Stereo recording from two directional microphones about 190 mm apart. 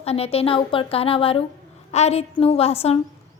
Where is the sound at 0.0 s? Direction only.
30° left (ahead or behind).